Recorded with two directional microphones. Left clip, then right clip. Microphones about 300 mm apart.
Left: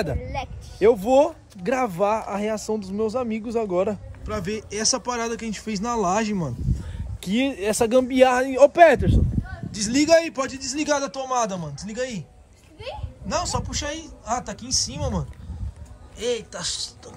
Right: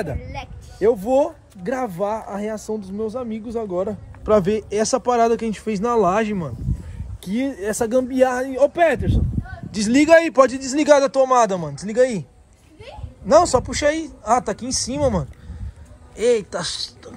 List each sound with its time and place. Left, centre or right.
0.2 s music: left
0.9 s a man's voice: centre
3.2 s speech: left
4.3 s a man's voice: centre
8.6 s speech: left
9.5 s a man's voice: centre